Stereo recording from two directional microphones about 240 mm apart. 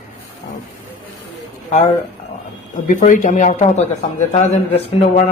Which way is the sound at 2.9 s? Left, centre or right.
Left.